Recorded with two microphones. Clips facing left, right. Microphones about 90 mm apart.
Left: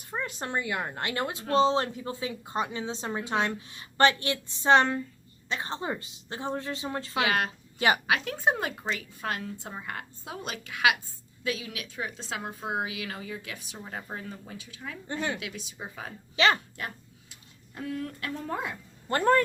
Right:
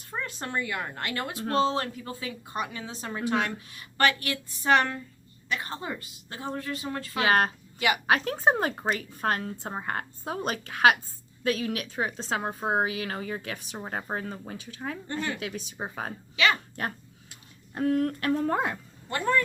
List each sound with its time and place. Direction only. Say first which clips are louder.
0.0 s a woman's voice: left 1 dB; 20° left (ahead or behind)
7.2 s a woman's voice: right 4 dB; 40° right (ahead or behind)
15.0 s a woman's voice: left 2 dB; 20° left (ahead or behind)
15.4 s a woman's voice: right 4 dB; 40° right (ahead or behind)
16.3 s a woman's voice: left 1 dB; 35° left (ahead or behind)
16.7 s dog: right 5 dB; 50° right (ahead or behind)
17.7 s speech: right 9 dB; 55° right (ahead or behind)
19.0 s speech: left 4 dB; 45° left (ahead or behind)